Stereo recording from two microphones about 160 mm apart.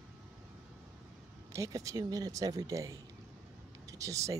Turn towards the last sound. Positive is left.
turn(degrees=-20)  # may be behind; listen again after turning